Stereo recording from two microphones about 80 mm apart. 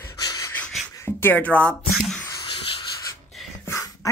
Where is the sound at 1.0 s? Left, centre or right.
Left.